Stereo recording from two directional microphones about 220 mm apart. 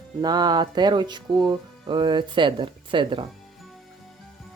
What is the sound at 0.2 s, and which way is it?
Speech, 20° right (ahead or behind).